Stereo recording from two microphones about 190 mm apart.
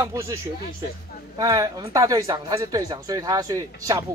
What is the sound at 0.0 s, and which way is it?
Speech, 15° right (ahead or behind).